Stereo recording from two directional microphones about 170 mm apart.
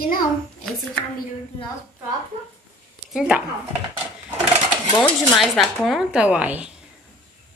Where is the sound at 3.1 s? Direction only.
5° right (ahead or behind).